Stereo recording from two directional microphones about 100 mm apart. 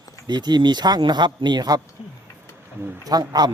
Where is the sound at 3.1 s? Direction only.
40° right (ahead or behind).